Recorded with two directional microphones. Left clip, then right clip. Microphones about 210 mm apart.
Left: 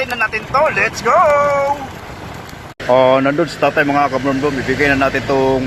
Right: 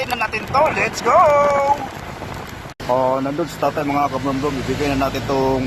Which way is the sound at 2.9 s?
20° left (ahead or behind).